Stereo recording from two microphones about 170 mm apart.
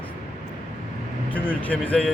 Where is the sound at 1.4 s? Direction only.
10° left (ahead or behind).